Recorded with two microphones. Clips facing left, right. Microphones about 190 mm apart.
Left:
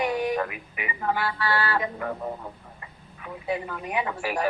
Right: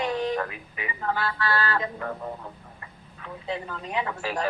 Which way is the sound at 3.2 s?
15° left (ahead or behind).